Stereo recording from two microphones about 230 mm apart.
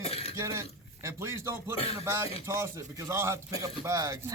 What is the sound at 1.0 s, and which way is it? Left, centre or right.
Speech, centre.